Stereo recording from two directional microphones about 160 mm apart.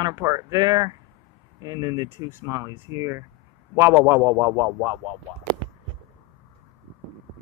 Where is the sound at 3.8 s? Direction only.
15° right (ahead or behind).